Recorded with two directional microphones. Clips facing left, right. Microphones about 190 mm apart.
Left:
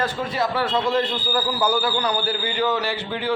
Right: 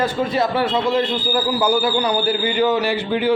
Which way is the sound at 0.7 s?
10° right (ahead or behind).